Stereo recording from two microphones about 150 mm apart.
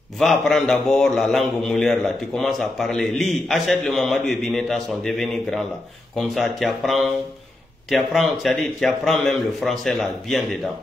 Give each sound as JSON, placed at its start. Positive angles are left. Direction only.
{"t": 0.2, "sound": "a man's voice", "side_deg": 0}
{"t": 6.6, "sound": "a man's voice", "side_deg": 0}